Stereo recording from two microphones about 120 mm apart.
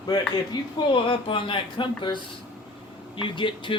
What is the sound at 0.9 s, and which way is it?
Speech, 45° left (ahead or behind).